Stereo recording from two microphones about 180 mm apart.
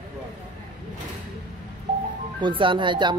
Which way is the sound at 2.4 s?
30° right (ahead or behind).